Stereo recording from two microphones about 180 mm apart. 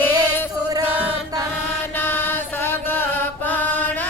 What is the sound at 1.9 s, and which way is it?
Chant, 10° left (ahead or behind).